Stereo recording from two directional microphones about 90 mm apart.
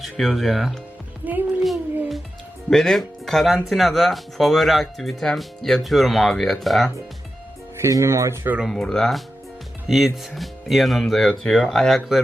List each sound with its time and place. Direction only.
0.0 s speech: centre (ahead or behind)
1.2 s speech: 20° right (ahead or behind)
2.6 s speech: 5° left (ahead or behind)
7.8 s speech: 35° right (ahead or behind)
8.4 s speech: 10° right (ahead or behind)
8.7 s speech: 5° left (ahead or behind)